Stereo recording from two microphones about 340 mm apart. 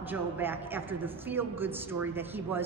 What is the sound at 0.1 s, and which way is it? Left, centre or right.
A woman's voice, centre.